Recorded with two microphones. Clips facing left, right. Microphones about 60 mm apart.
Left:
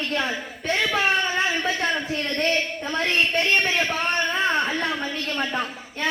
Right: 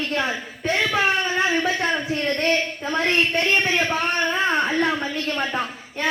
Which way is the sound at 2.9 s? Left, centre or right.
Centre.